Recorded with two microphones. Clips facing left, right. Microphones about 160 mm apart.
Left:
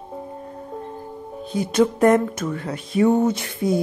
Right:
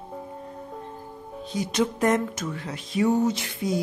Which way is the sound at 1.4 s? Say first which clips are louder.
Left 6 dB; 55° left (ahead or behind).